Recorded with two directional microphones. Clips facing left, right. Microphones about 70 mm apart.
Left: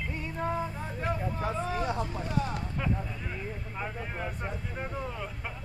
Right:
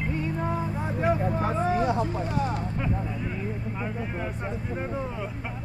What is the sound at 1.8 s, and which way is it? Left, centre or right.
Speech, centre.